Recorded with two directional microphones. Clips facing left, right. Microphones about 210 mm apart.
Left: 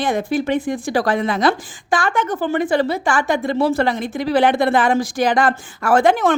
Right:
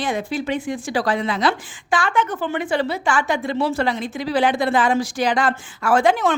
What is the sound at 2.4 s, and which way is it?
A woman's voice, 40° left (ahead or behind).